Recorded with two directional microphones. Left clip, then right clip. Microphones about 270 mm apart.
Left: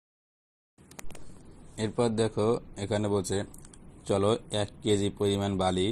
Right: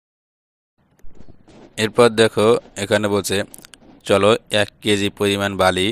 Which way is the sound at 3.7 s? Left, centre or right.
Right.